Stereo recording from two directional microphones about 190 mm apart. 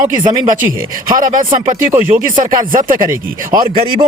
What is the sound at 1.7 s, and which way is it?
Speech, 15° right (ahead or behind).